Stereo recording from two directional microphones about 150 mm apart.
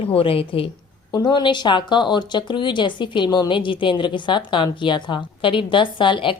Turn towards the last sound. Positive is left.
turn(degrees=35)  # may be behind; listen again after turning